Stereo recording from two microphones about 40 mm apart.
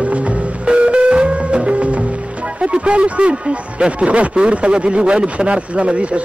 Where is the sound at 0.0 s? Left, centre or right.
Right.